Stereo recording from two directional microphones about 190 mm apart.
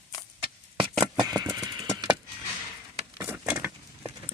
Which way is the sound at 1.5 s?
20° right (ahead or behind).